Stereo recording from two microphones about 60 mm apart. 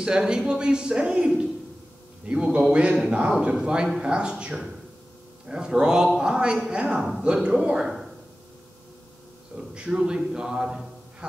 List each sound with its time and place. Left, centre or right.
0.0 s a man's voice: centre
9.6 s a man's voice: centre